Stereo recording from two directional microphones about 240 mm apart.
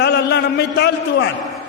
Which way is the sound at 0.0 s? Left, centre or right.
Left.